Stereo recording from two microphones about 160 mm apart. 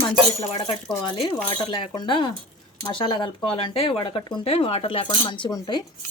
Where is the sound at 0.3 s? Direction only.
35° left (ahead or behind).